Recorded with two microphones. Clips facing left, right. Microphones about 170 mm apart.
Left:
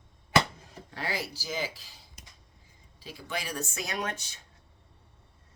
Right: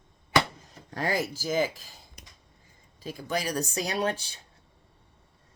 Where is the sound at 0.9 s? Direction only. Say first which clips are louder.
Right 6 dB; 45° right (ahead or behind).